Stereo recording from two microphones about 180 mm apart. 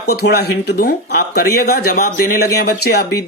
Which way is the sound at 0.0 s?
65° left (ahead or behind).